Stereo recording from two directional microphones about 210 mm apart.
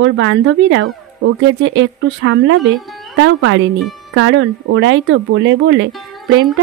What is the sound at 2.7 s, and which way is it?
Music, centre (ahead or behind).